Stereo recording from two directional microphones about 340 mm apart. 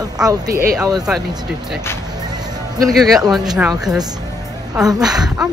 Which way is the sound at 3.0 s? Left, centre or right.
Centre.